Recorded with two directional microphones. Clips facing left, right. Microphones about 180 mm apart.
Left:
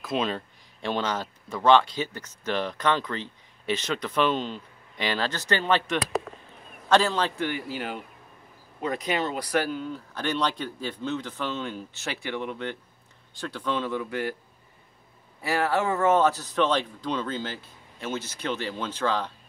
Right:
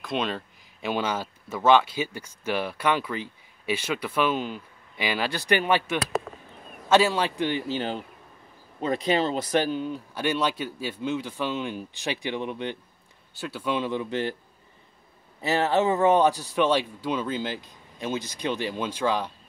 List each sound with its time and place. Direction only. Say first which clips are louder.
0.0 s a man's voice: left 1 dB; centre (ahead or behind); by 12.7 s 20° right (ahead or behind)
13.3 s speech: right 1 dB; 5° right (ahead or behind); by 14.3 s 25° right (ahead or behind)
15.4 s speech: right 3 dB; 20° right (ahead or behind)